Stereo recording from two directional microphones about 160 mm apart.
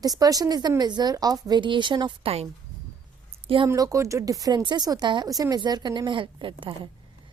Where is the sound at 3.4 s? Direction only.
35° right (ahead or behind).